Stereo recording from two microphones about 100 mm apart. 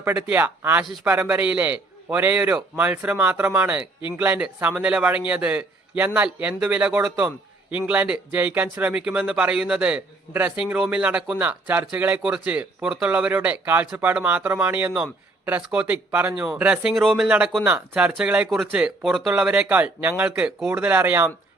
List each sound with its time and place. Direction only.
0.2 s a man's voice: 15° right (ahead or behind)
16.9 s speech: centre (ahead or behind)
17.2 s a man's voice: 10° right (ahead or behind)